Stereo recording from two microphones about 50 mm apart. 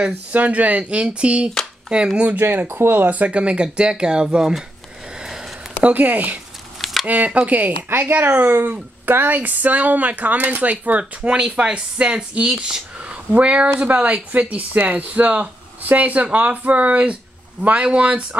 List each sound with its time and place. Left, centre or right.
0.0 s speech: right
2.3 s speech: right; by 4.6 s centre
5.2 s a sound: centre
5.9 s speech: right
6.8 s a sound: centre
7.1 s speech: right
9.0 s speech: right